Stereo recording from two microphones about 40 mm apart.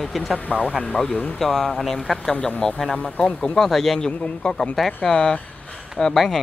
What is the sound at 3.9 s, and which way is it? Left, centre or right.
A man's voice, left.